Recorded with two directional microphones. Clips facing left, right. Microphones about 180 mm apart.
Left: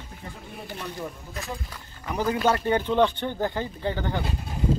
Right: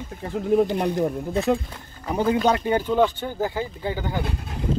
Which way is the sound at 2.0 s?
25° right (ahead or behind).